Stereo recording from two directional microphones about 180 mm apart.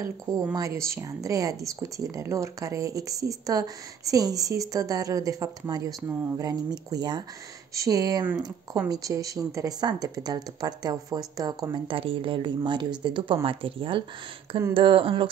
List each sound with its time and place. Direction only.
0.0 s speech: 20° right (ahead or behind)